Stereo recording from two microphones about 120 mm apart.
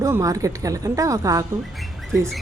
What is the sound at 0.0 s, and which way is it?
A woman's voice, 25° right (ahead or behind).